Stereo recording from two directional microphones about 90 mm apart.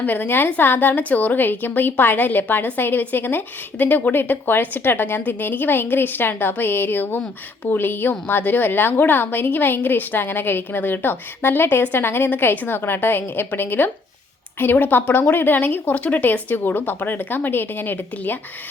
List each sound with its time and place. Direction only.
0.0 s a woman's voice: 20° left (ahead or behind)